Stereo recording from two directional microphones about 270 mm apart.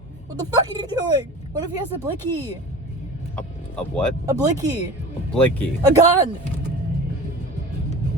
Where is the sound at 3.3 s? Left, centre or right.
Centre.